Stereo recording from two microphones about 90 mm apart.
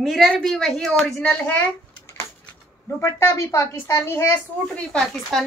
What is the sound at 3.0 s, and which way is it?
A woman's voice, 30° left (ahead or behind).